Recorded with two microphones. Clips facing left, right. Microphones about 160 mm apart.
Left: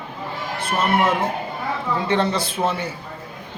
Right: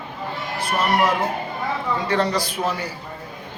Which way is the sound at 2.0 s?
25° left (ahead or behind).